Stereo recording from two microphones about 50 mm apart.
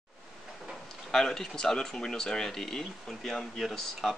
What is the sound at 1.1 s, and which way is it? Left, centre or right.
Speech, centre.